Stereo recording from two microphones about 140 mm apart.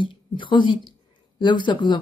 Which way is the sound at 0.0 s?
35° left (ahead or behind).